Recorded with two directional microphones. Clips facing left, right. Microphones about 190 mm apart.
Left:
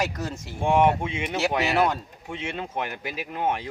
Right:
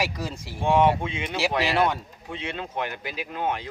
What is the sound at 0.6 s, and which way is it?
Speech, 15° left (ahead or behind).